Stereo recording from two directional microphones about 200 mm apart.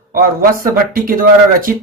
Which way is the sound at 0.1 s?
45° right (ahead or behind).